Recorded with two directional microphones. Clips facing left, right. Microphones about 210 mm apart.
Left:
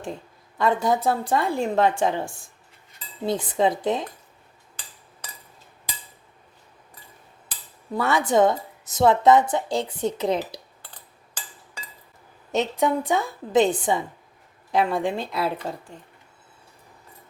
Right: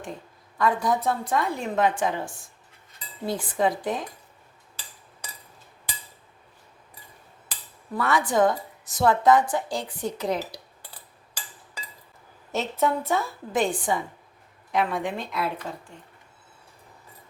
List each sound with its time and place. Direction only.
0.6 s a woman's voice: 25° left (ahead or behind)
3.2 s a woman's voice: 20° left (ahead or behind)
7.9 s a woman's voice: 25° left (ahead or behind)
10.8 s a sound: 10° right (ahead or behind)
12.5 s a woman's voice: 15° left (ahead or behind); by 15.8 s 40° left (ahead or behind)